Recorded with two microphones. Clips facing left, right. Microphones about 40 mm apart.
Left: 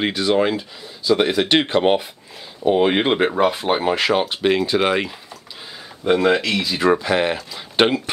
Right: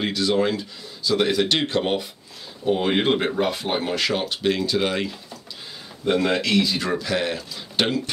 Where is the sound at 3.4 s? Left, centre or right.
Centre.